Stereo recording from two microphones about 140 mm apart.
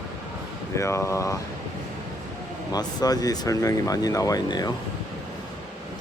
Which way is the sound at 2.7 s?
25° left (ahead or behind).